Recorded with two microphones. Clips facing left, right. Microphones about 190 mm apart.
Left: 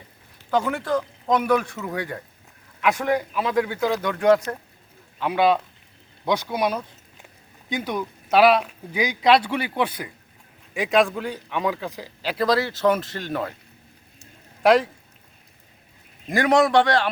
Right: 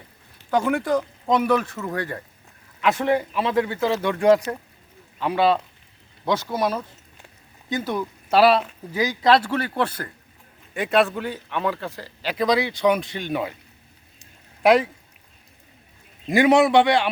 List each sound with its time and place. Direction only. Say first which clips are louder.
0.5 s speech: right 2 dB; 5° right (ahead or behind)
5.2 s speech: even; 10° left (ahead or behind)
6.3 s speech: even; 5° right (ahead or behind)
8.4 s a man's voice: even; 10° left (ahead or behind)
9.2 s a man's voice: even; centre (ahead or behind)
10.8 s speech: even; centre (ahead or behind)
14.6 s speech: even; 10° right (ahead or behind)
16.3 s a man's voice: right 2 dB; 20° right (ahead or behind)